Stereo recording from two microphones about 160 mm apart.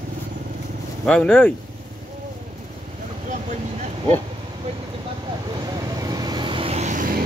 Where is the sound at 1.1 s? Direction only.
5° left (ahead or behind).